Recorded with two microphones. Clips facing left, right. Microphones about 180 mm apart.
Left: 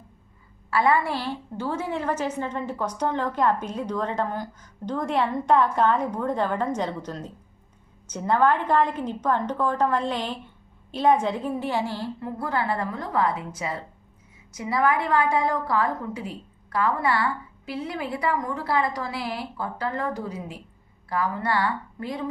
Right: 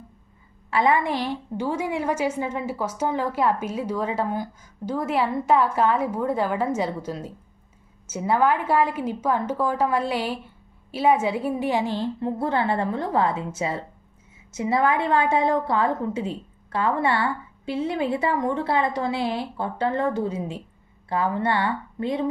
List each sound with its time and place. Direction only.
0.7 s a woman's voice: 20° right (ahead or behind)